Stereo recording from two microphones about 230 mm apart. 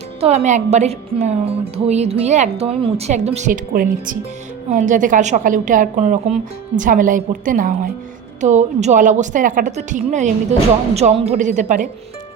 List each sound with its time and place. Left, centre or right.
0.2 s a woman's voice: right